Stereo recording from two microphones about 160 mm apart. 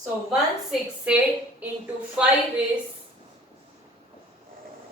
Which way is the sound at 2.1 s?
5° right (ahead or behind).